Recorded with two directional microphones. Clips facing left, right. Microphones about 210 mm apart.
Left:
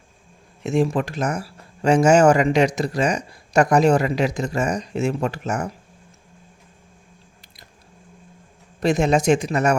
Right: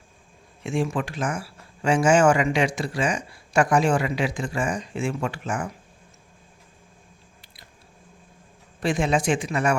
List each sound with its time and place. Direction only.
0.6 s speech: 40° left (ahead or behind)
8.8 s speech: 40° left (ahead or behind)